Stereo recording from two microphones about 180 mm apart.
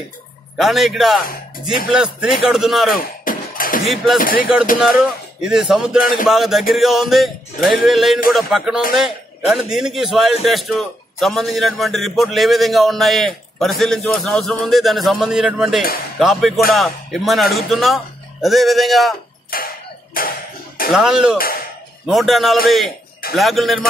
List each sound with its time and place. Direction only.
0.6 s a man's voice: centre (ahead or behind)
3.0 s a sound: 50° left (ahead or behind)
3.9 s a man's voice: centre (ahead or behind)
4.2 s cough: 50° left (ahead or behind)
4.7 s a man's voice: centre (ahead or behind)
19.5 s cough: 55° left (ahead or behind)
20.9 s a man's voice: 5° right (ahead or behind)